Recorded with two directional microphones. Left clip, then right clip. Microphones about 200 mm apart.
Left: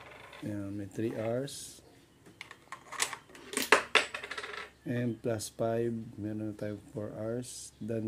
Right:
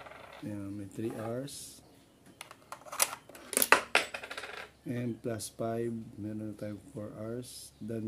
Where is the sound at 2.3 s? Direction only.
45° right (ahead or behind).